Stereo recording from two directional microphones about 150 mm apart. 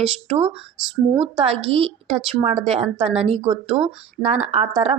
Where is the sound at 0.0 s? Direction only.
35° right (ahead or behind).